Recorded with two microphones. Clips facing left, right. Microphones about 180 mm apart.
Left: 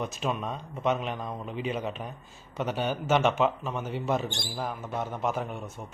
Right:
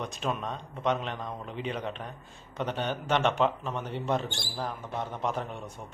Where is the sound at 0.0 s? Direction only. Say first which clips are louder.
Left 2 dB; 5° left (ahead or behind).